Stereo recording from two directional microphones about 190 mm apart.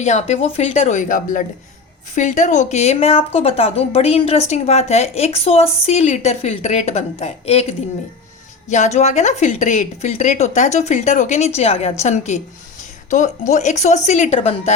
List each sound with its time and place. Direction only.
0.0 s a woman's voice: 35° left (ahead or behind)